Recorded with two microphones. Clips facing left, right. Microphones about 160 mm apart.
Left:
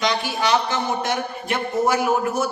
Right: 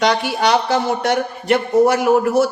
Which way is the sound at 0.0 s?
65° right (ahead or behind).